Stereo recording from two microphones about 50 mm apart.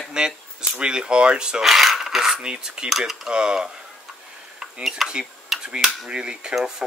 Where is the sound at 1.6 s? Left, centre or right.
Centre.